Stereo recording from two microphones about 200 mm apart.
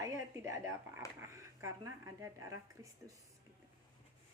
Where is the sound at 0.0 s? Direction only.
15° right (ahead or behind).